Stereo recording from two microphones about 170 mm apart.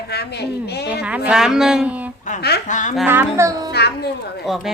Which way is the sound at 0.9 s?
5° right (ahead or behind).